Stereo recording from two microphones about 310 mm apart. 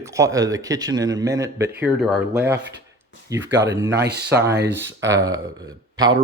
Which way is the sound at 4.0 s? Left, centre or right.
Right.